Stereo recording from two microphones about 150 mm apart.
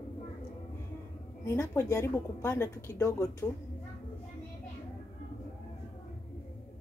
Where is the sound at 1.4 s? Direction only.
20° left (ahead or behind).